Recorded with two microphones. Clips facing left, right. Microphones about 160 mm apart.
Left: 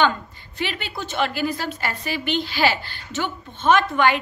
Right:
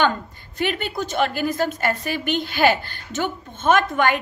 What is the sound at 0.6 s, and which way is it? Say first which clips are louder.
A woman's voice: right 5 dB; 45° right (ahead or behind).